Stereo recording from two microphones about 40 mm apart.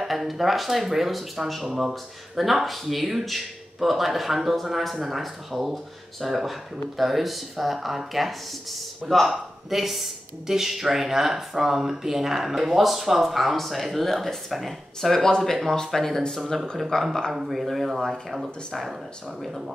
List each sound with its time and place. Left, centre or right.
0.1 s speech: centre
16.9 s speech: centre
17.3 s speech: centre